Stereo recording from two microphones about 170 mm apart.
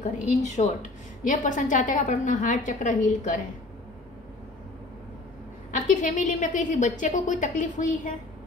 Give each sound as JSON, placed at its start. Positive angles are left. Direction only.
{"t": 0.0, "sound": "a woman's voice", "side_deg": 45}
{"t": 5.7, "sound": "a woman's voice", "side_deg": 50}